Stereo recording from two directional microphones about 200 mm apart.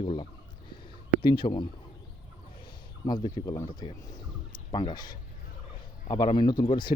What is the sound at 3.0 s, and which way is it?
Speech, 20° left (ahead or behind).